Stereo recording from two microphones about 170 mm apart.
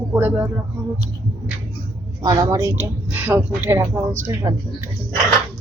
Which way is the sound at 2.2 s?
20° right (ahead or behind).